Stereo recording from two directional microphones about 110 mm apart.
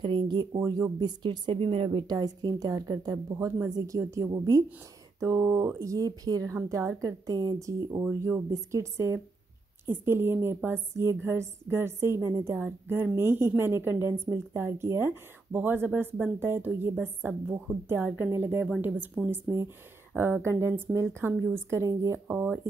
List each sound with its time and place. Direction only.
0.0 s a sound: 45° right (ahead or behind)
0.6 s a woman's voice: 30° right (ahead or behind)
0.9 s a woman's voice: 40° right (ahead or behind)
2.0 s a woman's voice: 35° right (ahead or behind); by 8.4 s 20° right (ahead or behind)
8.5 s a woman's voice: 30° right (ahead or behind)
12.5 s a woman's voice: 15° right (ahead or behind)